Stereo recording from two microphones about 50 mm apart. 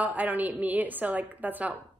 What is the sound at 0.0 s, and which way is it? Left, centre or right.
A woman's voice, right.